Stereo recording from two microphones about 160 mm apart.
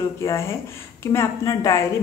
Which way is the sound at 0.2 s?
15° left (ahead or behind).